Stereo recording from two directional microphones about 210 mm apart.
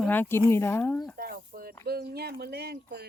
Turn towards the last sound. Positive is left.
turn(degrees=-50)  # may be behind; listen again after turning